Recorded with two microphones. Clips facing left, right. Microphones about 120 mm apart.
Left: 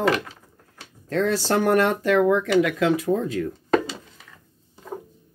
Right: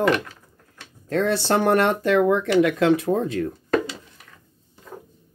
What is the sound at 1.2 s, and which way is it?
Speech, 25° right (ahead or behind).